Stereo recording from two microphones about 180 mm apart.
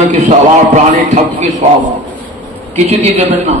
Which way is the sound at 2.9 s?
35° right (ahead or behind).